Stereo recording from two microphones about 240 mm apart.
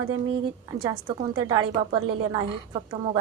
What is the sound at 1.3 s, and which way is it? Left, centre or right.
A woman's voice, centre.